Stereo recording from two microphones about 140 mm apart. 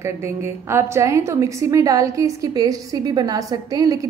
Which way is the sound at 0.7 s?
20° right (ahead or behind).